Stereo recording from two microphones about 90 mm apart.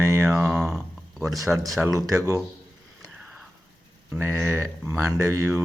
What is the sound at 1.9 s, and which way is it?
Mantra, 40° right (ahead or behind).